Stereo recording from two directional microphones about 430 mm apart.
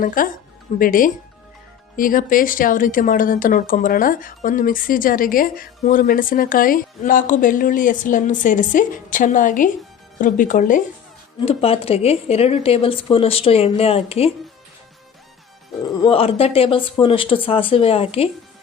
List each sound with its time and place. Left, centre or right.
0.0 s speech: centre
16.0 s speech: centre